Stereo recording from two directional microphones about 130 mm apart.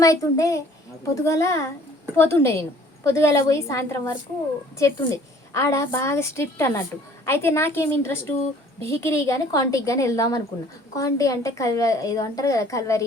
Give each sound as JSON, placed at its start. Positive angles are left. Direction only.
{"t": 0.0, "sound": "a woman's voice", "side_deg": 25}